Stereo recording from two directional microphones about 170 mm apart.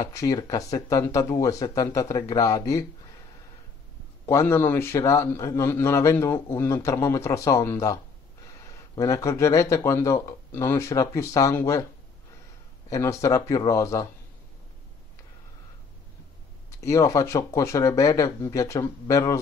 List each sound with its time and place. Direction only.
0.0 s speech: 20° left (ahead or behind)
4.3 s a man's voice: 15° left (ahead or behind)
12.9 s speech: 20° left (ahead or behind)
16.8 s speech: 20° left (ahead or behind)